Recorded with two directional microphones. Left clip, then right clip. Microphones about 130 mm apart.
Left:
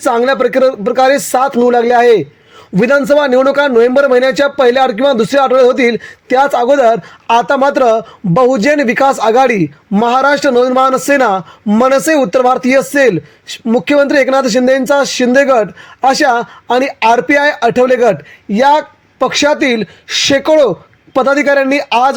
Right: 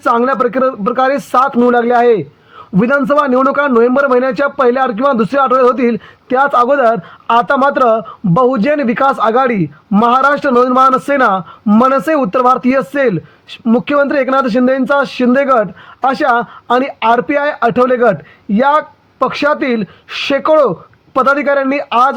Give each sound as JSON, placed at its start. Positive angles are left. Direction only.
{"t": 0.1, "sound": "speech", "side_deg": 40}
{"t": 2.7, "sound": "a man's voice", "side_deg": 25}
{"t": 3.2, "sound": "a man's voice", "side_deg": 40}